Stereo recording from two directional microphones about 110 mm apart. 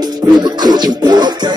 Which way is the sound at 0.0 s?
40° right (ahead or behind).